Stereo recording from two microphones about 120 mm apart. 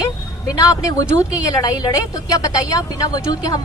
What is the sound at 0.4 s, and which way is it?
A woman's voice, 30° left (ahead or behind).